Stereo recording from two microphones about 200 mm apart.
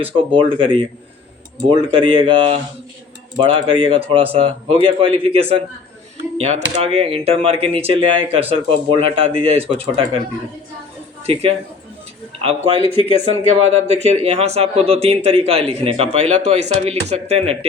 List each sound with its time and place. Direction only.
0.0 s speech: 25° right (ahead or behind)
12.4 s speech: 30° right (ahead or behind)